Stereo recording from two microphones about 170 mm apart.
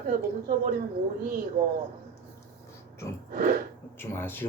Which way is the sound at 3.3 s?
60° right (ahead or behind).